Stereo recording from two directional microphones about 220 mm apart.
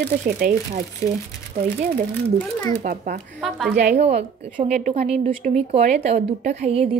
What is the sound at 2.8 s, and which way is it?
Speech, 35° right (ahead or behind).